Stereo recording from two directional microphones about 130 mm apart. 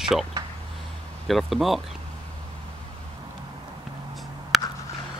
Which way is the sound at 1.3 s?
Centre (ahead or behind).